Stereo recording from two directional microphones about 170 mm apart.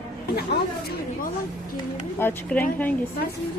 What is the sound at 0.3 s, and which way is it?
Speech, 65° left (ahead or behind).